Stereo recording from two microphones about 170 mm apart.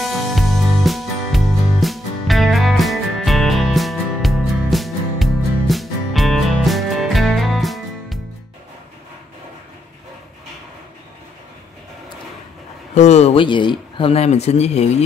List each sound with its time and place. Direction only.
0.0 s music: centre (ahead or behind)
12.9 s speech: 40° left (ahead or behind)